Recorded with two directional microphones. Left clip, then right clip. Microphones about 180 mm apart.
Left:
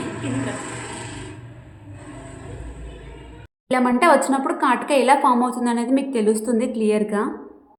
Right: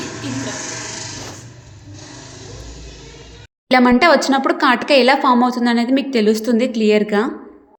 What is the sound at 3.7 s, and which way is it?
A woman's voice, 25° right (ahead or behind).